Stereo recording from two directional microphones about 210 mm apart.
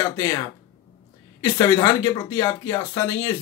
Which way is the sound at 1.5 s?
20° left (ahead or behind).